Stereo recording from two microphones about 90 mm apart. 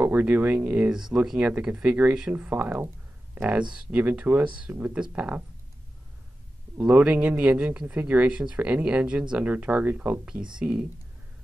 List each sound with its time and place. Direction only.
0.0 s speech: 20° right (ahead or behind)
3.9 s speech: 15° right (ahead or behind)
6.8 s speech: 15° right (ahead or behind)